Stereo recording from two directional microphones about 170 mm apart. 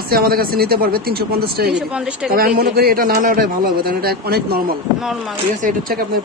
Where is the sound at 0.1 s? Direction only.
60° right (ahead or behind).